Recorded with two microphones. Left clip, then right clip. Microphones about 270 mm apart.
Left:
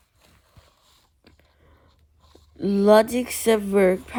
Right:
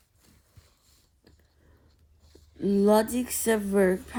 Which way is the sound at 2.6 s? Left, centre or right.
Left.